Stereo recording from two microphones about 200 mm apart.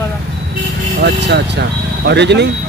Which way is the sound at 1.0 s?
55° right (ahead or behind).